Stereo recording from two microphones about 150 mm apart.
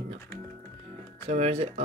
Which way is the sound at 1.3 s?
45° right (ahead or behind).